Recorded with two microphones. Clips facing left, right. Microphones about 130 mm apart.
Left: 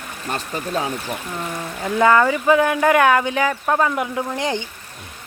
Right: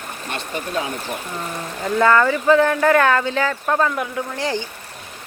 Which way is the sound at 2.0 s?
10° left (ahead or behind).